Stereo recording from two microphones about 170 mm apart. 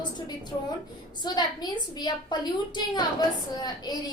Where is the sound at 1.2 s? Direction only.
25° left (ahead or behind).